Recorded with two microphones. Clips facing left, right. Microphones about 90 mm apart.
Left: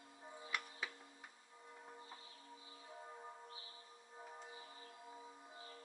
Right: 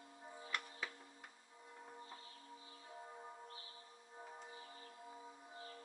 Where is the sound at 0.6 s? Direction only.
Centre (ahead or behind).